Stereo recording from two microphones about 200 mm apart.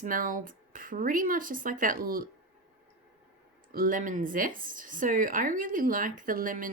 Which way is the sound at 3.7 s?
45° right (ahead or behind).